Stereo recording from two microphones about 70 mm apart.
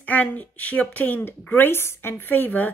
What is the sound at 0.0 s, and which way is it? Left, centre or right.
Speech, left.